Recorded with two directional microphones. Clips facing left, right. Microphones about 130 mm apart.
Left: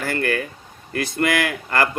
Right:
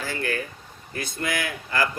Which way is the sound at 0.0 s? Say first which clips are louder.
Left 6 dB; 60° left (ahead or behind).